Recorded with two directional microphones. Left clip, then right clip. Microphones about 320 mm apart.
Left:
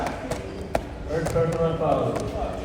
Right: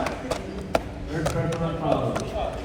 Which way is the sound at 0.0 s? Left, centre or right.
Right.